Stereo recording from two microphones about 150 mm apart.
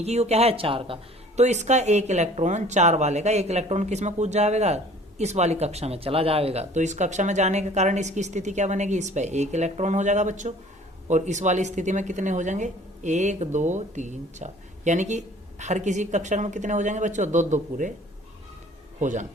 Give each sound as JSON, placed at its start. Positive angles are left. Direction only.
{"t": 0.0, "sound": "speech", "side_deg": -45}
{"t": 1.4, "sound": "speech", "side_deg": -50}
{"t": 18.9, "sound": "speech", "side_deg": -55}